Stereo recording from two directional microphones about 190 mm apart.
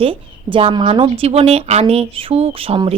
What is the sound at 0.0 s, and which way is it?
A woman's voice, 30° right (ahead or behind).